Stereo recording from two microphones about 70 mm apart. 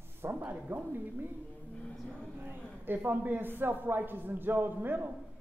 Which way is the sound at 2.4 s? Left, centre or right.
Right.